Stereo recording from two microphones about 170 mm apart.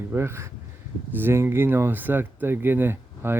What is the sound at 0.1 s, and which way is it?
Speech, 15° right (ahead or behind).